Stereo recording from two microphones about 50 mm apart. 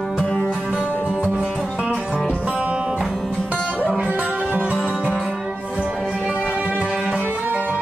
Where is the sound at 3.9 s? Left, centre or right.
Right.